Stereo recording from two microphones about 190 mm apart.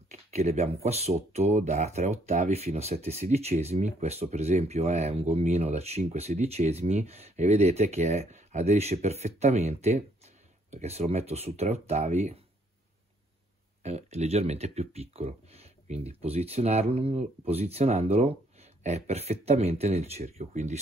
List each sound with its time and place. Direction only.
0.1 s a sound: 35° right (ahead or behind)
0.8 s speech: 35° right (ahead or behind)
13.8 s speech: 35° right (ahead or behind)